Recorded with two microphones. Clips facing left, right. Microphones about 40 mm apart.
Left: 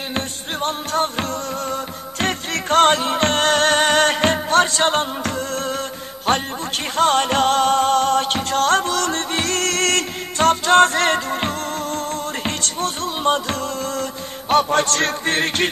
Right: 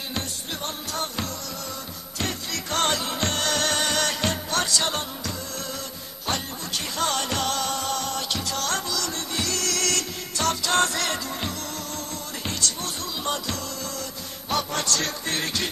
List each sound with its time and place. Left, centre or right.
0.1 s music: left